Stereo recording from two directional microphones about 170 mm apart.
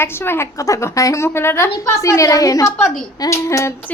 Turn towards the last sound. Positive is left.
turn(degrees=15)  # may be behind; listen again after turning